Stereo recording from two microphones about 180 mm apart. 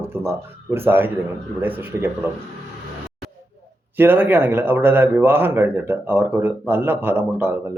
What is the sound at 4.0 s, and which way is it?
Speech, 10° right (ahead or behind).